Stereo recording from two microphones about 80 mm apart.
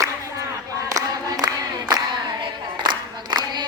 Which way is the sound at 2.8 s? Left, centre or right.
Right.